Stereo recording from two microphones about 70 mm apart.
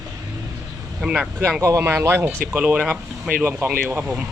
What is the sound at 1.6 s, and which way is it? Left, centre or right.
Speech, right.